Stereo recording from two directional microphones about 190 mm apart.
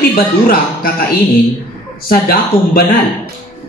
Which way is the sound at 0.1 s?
50° left (ahead or behind).